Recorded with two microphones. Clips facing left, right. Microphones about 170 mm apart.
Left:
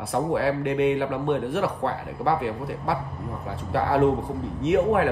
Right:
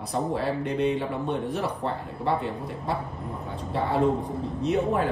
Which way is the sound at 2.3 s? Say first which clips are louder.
Left 3 dB; centre (ahead or behind).